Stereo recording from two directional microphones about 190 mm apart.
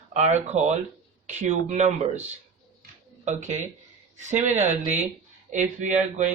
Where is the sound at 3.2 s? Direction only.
40° right (ahead or behind).